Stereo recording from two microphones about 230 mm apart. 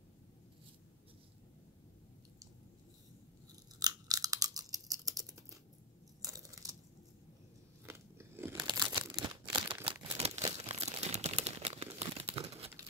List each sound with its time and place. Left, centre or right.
3.8 s a sound: centre
7.8 s biting: centre
8.7 s crumpling: centre